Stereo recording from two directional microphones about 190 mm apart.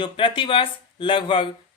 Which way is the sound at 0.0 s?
25° left (ahead or behind).